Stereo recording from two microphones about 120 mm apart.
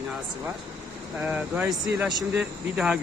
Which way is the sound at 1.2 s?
10° right (ahead or behind).